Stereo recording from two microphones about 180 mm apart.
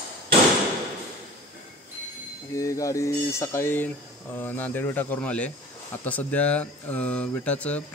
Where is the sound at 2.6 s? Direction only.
20° left (ahead or behind).